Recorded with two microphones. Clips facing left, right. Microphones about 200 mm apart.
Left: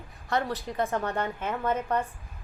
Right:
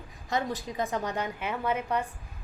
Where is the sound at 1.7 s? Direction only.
10° right (ahead or behind).